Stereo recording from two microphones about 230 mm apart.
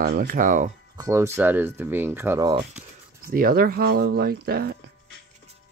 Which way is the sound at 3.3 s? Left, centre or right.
Right.